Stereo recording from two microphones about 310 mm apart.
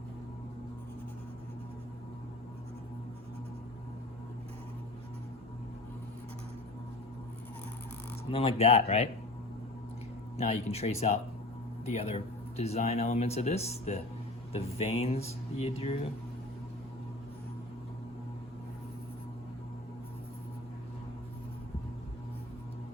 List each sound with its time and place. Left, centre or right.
8.3 s speech: centre
10.3 s speech: centre